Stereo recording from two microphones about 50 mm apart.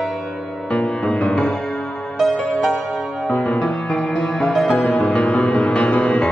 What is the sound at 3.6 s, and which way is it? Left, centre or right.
Music, centre.